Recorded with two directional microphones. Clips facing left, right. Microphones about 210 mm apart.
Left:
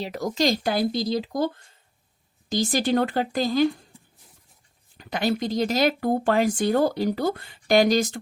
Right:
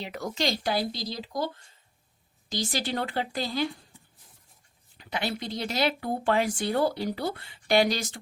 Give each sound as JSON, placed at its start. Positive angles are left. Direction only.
{"t": 0.0, "sound": "speech", "side_deg": 40}
{"t": 2.5, "sound": "speech", "side_deg": 50}
{"t": 4.9, "sound": "speech", "side_deg": 45}